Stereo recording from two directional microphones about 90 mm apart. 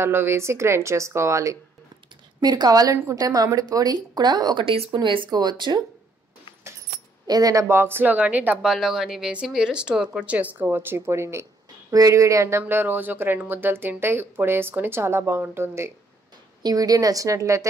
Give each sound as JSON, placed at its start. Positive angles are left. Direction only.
{"t": 0.0, "sound": "a woman's voice", "side_deg": -25}
{"t": 2.4, "sound": "speech", "side_deg": -50}
{"t": 5.0, "sound": "speech", "side_deg": -65}
{"t": 5.3, "sound": "speech", "side_deg": -50}
{"t": 7.2, "sound": "speech", "side_deg": -45}
{"t": 7.6, "sound": "speech", "side_deg": -25}
{"t": 8.6, "sound": "speech", "side_deg": -5}
{"t": 16.6, "sound": "a woman's voice", "side_deg": -45}